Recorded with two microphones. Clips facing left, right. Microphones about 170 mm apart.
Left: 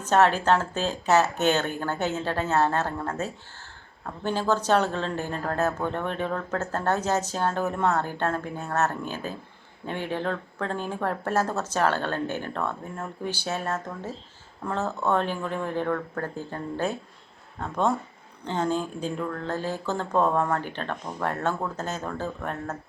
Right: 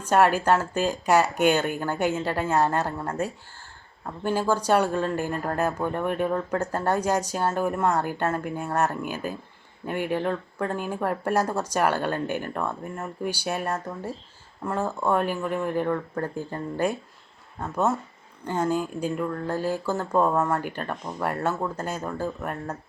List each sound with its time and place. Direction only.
0.0 s speech: 10° right (ahead or behind)